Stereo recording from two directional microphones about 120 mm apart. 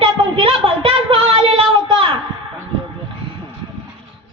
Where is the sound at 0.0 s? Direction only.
50° right (ahead or behind).